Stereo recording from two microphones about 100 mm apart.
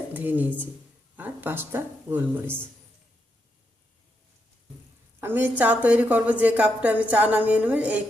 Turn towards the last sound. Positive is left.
turn(degrees=-15)  # may be behind; listen again after turning